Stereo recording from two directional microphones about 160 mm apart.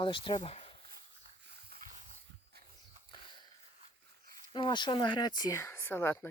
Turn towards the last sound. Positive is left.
turn(degrees=15)  # may be behind; listen again after turning